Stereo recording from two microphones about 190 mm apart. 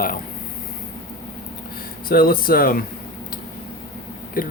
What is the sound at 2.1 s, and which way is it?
Speech, 50° left (ahead or behind).